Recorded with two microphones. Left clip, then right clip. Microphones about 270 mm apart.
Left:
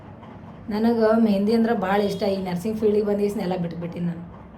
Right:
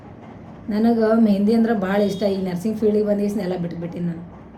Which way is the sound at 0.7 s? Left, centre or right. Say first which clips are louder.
Right 1 dB; centre.